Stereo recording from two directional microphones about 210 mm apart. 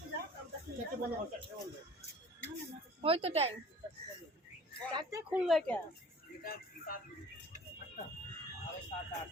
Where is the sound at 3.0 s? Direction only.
25° right (ahead or behind).